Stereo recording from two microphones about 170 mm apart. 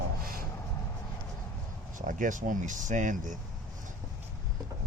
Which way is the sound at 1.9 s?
50° right (ahead or behind).